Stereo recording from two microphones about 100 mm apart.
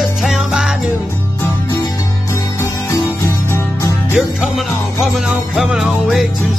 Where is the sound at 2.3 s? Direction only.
30° left (ahead or behind).